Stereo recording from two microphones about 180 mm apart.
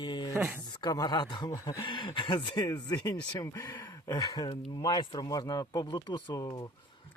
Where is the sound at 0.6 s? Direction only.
20° left (ahead or behind).